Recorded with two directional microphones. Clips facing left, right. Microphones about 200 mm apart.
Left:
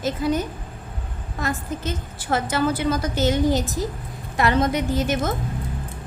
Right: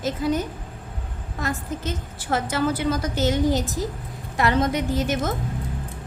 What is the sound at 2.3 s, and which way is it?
A woman's voice, 65° left (ahead or behind).